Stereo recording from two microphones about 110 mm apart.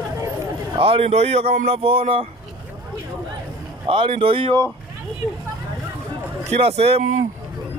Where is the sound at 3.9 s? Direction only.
55° right (ahead or behind).